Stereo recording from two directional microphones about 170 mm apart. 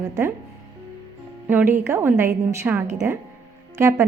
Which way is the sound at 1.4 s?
10° right (ahead or behind).